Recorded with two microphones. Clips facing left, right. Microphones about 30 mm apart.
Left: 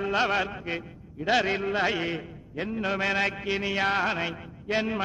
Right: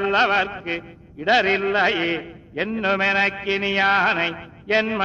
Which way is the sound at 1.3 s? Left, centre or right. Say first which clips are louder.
Right 7 dB; right.